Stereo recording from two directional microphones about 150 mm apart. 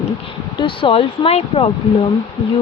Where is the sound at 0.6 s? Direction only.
35° left (ahead or behind).